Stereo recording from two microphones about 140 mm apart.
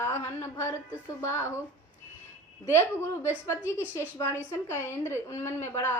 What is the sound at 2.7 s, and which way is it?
Speech, 20° left (ahead or behind).